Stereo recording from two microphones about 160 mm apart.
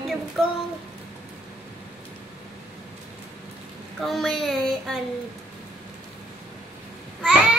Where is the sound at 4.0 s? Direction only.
Centre (ahead or behind).